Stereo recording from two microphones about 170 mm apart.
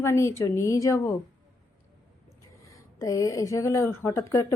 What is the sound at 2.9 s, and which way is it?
A woman's voice, 20° left (ahead or behind).